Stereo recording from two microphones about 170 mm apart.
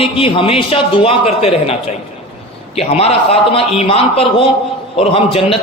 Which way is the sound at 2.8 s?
35° left (ahead or behind).